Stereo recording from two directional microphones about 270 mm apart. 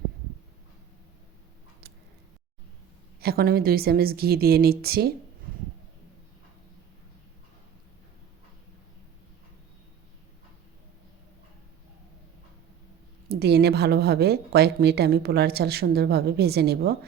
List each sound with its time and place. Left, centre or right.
3.2 s a woman's voice: right
13.2 s a woman's voice: right